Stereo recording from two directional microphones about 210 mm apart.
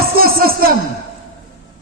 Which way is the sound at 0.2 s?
45° right (ahead or behind).